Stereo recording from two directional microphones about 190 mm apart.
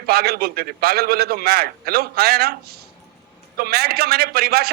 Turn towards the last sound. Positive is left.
turn(degrees=-55)  # may be behind; listen again after turning